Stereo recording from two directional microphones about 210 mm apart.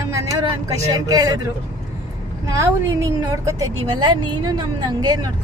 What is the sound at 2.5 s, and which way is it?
Speech, 15° right (ahead or behind).